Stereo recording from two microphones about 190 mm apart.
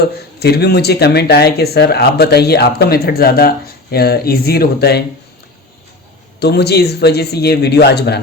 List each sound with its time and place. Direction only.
0.0 s speech: 55° left (ahead or behind)
6.4 s speech: 60° left (ahead or behind)